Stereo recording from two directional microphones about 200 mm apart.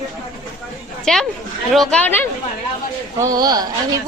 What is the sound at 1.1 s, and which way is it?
Speech, 5° left (ahead or behind).